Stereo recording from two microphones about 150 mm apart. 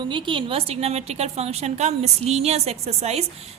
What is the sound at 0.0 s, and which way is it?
A woman's voice, 30° right (ahead or behind).